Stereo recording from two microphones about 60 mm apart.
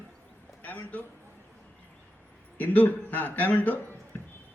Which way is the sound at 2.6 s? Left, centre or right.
Left.